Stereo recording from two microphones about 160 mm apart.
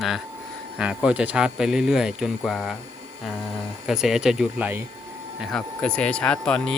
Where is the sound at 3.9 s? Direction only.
5° right (ahead or behind).